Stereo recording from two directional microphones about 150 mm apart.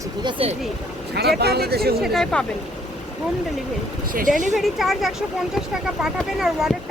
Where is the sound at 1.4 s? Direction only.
90° right.